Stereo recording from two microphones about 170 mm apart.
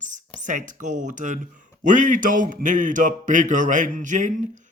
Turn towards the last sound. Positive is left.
turn(degrees=-45)  # may be behind; listen again after turning